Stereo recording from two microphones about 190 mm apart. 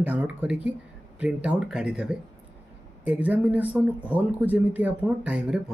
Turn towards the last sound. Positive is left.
turn(degrees=-5)  # may be behind; listen again after turning